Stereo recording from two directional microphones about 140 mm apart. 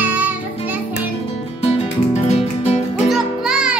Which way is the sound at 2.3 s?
50° left (ahead or behind).